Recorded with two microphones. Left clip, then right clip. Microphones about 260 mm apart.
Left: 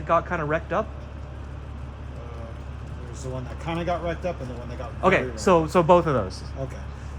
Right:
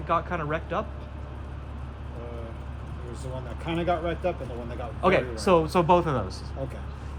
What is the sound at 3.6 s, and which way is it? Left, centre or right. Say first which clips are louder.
Speech: even; left.